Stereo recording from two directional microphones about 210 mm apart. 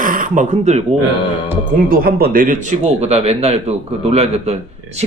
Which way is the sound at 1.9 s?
45° right (ahead or behind).